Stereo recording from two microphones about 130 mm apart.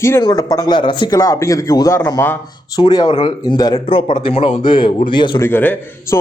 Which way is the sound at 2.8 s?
35° left (ahead or behind).